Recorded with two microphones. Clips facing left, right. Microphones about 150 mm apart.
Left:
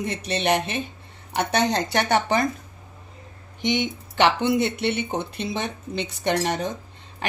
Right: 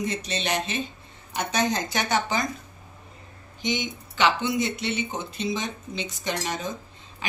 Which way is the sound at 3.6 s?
65° left (ahead or behind).